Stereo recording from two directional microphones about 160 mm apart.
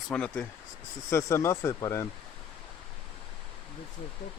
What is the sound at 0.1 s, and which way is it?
Speech, 5° left (ahead or behind).